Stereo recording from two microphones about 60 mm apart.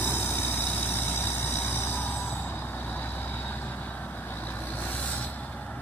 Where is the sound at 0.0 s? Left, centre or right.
Left.